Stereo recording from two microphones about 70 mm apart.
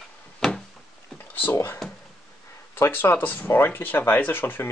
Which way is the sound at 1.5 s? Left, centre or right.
Left.